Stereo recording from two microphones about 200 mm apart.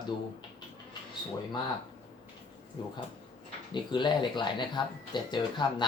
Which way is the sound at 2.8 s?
25° left (ahead or behind).